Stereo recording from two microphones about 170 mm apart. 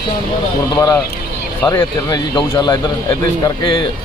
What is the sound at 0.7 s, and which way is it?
Speech, 20° left (ahead or behind).